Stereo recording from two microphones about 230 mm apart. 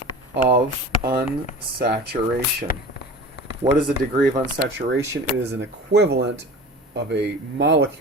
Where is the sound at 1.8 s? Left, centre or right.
Right.